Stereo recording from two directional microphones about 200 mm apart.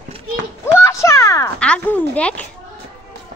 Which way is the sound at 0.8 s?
15° left (ahead or behind).